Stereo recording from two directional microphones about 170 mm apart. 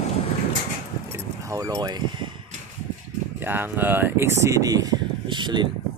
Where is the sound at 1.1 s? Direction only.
20° right (ahead or behind).